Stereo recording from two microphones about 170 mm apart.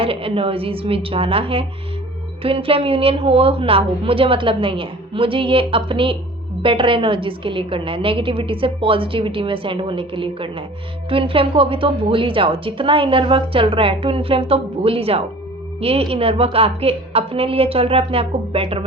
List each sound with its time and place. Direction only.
0.0 s a woman's voice: 35° right (ahead or behind)